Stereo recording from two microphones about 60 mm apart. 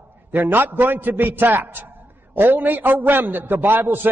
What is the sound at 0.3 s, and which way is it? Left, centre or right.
A man's voice, right.